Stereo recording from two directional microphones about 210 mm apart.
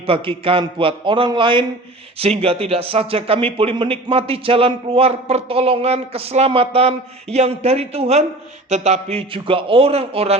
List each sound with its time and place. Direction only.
0.0 s speech: 25° right (ahead or behind)